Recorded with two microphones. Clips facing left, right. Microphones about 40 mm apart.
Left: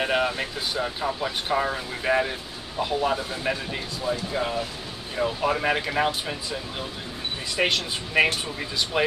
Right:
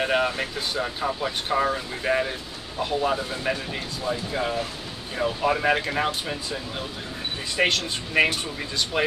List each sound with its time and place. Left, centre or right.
0.0 s speech: centre